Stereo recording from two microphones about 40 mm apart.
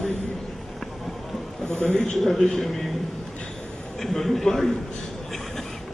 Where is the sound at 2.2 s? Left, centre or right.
Centre.